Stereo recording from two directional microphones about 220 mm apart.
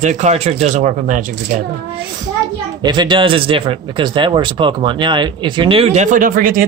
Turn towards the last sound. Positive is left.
turn(degrees=-40)  # may be behind; listen again after turning